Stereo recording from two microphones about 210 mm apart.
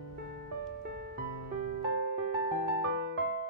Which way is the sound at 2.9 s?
60° right (ahead or behind).